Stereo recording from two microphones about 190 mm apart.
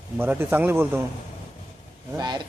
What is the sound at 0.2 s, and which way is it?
Speech, 10° right (ahead or behind).